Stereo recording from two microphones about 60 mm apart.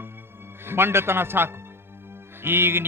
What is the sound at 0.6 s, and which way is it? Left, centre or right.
A man's voice, right.